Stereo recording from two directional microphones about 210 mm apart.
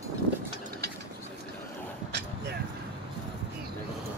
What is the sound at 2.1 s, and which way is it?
Vehicle, 55° right (ahead or behind).